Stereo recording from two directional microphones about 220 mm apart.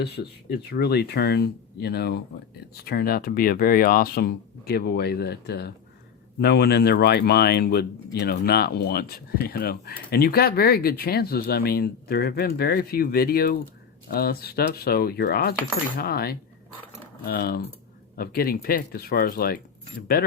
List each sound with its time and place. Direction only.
0.0 s speech: 45° left (ahead or behind)